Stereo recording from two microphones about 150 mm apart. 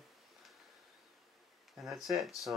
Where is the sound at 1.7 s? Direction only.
Centre (ahead or behind).